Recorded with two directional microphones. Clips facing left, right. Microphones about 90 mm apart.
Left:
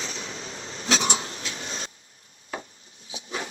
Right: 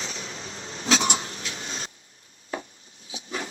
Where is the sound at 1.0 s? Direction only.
30° left (ahead or behind).